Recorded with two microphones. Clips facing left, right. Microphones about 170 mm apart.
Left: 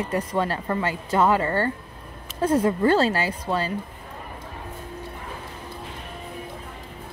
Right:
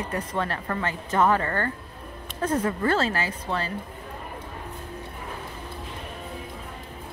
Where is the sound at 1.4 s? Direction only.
25° left (ahead or behind).